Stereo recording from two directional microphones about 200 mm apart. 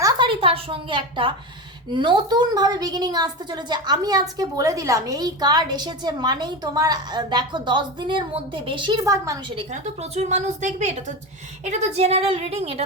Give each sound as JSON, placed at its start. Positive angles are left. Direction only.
{"t": 0.0, "sound": "a sound", "side_deg": -25}
{"t": 1.9, "sound": "a woman's voice", "side_deg": -25}
{"t": 9.6, "sound": "a woman's voice", "side_deg": -30}